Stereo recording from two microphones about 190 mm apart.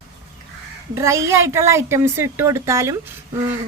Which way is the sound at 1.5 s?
15° right (ahead or behind).